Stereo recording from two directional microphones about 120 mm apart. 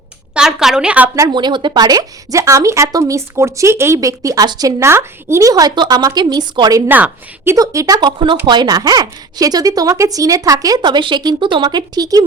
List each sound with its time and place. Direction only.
0.3 s a woman's voice: 5° right (ahead or behind)
1.3 s speech: 40° right (ahead or behind)
6.8 s a woman's voice: 15° right (ahead or behind)
7.5 s speech: 30° right (ahead or behind)
8.0 s speech: 40° right (ahead or behind)